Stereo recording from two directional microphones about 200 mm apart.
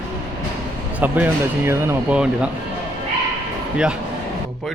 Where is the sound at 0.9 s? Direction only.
10° right (ahead or behind).